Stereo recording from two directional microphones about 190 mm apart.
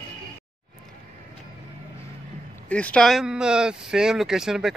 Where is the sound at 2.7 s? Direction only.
5° left (ahead or behind).